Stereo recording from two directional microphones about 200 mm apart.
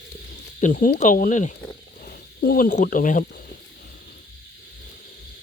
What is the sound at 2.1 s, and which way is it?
Speech, 50° left (ahead or behind).